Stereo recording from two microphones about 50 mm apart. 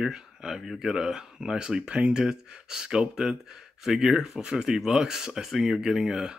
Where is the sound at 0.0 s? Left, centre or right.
Centre.